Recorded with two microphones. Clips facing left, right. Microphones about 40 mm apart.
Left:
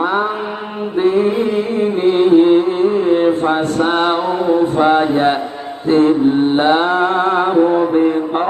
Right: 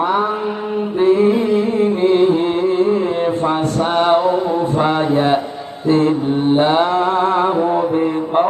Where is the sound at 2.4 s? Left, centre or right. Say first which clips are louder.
Left 4 dB; centre.